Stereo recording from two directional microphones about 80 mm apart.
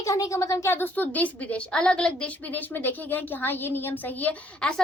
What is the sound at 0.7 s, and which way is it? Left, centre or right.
A woman's voice, left.